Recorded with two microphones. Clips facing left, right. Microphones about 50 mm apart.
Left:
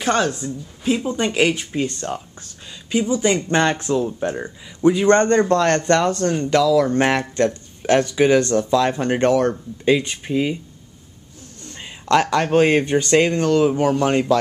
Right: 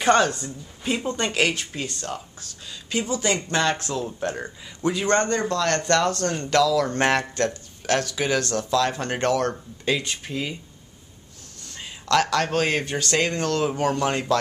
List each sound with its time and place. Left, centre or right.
0.0 s speech: centre
1.9 s speech: left
2.9 s speech: centre
3.4 s speech: left
5.3 s a man's voice: left
5.9 s speech: centre
7.8 s speech: left
11.6 s speech: left